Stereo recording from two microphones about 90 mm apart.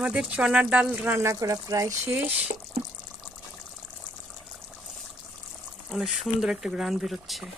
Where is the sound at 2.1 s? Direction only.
15° right (ahead or behind).